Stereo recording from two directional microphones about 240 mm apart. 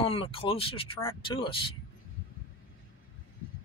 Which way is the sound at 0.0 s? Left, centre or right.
Left.